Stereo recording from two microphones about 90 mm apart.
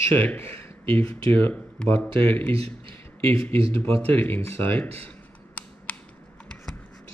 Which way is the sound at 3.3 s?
90° right.